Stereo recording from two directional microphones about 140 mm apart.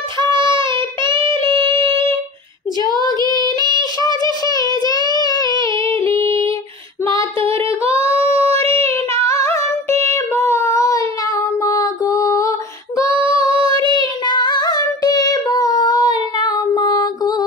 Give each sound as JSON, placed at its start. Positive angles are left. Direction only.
{"t": 0.2, "sound": "child singing", "side_deg": -35}
{"t": 2.8, "sound": "child singing", "side_deg": -30}
{"t": 5.2, "sound": "a sound", "side_deg": 30}
{"t": 6.0, "sound": "female singing", "side_deg": 20}
{"t": 7.1, "sound": "a sound", "side_deg": -40}
{"t": 8.2, "sound": "female singing", "side_deg": -45}
{"t": 9.2, "sound": "female singing", "side_deg": 20}
{"t": 10.0, "sound": "child singing", "side_deg": 20}
{"t": 13.5, "sound": "child singing", "side_deg": -40}
{"t": 14.2, "sound": "singing", "side_deg": 30}